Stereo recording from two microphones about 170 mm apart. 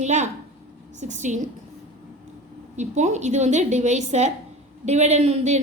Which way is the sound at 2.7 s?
45° right (ahead or behind).